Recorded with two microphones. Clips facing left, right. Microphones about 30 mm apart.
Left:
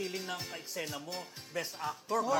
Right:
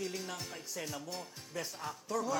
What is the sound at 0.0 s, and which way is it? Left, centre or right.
Music, left.